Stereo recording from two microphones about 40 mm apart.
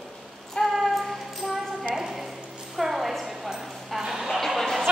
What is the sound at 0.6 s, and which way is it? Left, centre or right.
Music, centre.